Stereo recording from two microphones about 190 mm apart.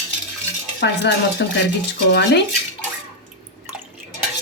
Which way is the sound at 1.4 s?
65° left (ahead or behind).